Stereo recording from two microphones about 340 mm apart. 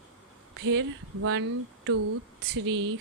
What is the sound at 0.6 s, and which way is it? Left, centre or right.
Speech, right.